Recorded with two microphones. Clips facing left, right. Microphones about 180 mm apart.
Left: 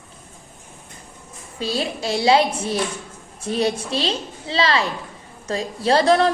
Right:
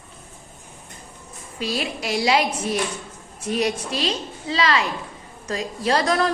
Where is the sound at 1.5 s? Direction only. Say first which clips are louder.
Left 2 dB; 30° left (ahead or behind).